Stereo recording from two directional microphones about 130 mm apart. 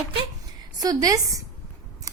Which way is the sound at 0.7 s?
30° right (ahead or behind).